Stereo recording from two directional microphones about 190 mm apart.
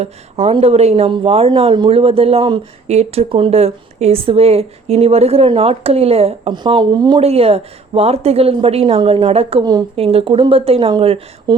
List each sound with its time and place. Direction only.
0.0 s speech: 30° right (ahead or behind)